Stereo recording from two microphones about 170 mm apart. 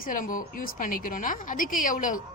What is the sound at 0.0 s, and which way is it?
A woman's voice, 50° left (ahead or behind).